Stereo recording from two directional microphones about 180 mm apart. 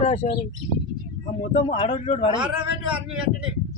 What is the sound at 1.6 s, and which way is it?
Speech, 30° left (ahead or behind).